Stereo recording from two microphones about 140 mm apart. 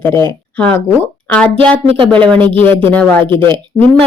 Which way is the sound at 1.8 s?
45° right (ahead or behind).